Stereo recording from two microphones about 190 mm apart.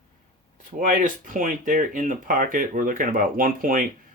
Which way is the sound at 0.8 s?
40° right (ahead or behind).